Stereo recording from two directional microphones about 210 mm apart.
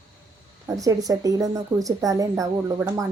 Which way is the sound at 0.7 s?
15° right (ahead or behind).